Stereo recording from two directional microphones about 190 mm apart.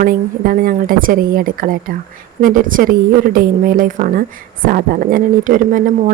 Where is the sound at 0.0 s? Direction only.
50° right (ahead or behind).